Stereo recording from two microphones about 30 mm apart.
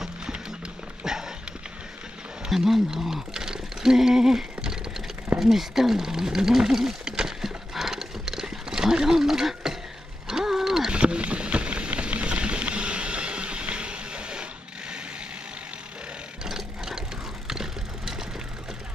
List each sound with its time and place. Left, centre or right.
1.0 s a sound: centre
2.5 s speech: centre
3.3 s a sound: centre
5.4 s speech: centre
7.1 s a sound: right
7.4 s wild animals: centre
10.2 s mechanisms: centre
10.9 s rowboat: right
11.1 s boat: right
12.3 s water: right
16.4 s engine: centre
17.5 s vehicle: centre